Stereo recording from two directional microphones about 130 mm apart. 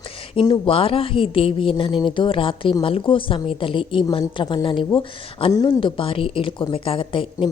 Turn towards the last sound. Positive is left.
turn(degrees=45)  # may be behind; listen again after turning